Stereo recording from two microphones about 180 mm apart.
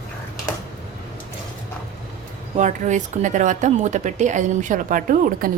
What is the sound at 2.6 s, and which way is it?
Speech, 45° right (ahead or behind).